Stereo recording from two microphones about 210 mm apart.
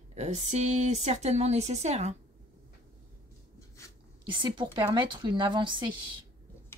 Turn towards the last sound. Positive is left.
turn(degrees=-20)  # may be behind; listen again after turning